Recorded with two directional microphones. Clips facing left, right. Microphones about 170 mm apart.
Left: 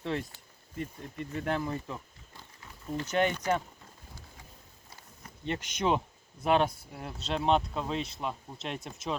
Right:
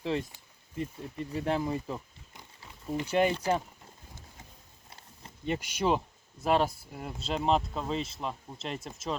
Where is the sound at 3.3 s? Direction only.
30° right (ahead or behind).